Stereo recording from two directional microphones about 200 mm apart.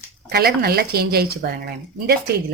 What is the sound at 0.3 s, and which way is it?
Speech, 50° right (ahead or behind).